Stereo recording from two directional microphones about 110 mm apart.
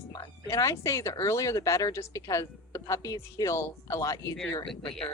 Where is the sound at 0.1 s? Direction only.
30° left (ahead or behind).